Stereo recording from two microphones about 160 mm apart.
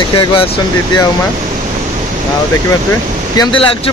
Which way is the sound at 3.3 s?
30° left (ahead or behind).